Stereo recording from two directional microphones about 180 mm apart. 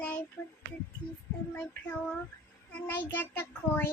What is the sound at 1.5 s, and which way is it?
A child's voice, 10° left (ahead or behind).